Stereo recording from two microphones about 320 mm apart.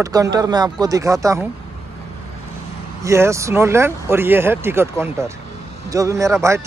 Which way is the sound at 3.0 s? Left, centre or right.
Centre.